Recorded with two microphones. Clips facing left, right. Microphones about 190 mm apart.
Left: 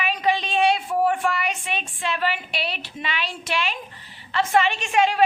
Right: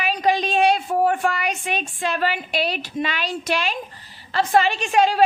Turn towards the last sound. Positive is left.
turn(degrees=-35)  # may be behind; listen again after turning